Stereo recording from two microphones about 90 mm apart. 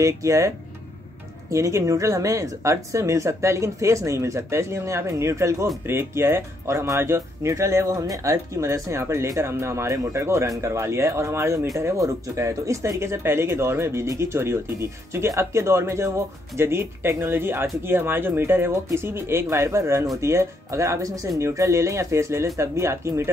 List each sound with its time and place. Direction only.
0.0 s speech: 35° right (ahead or behind)
1.5 s speech: 35° right (ahead or behind)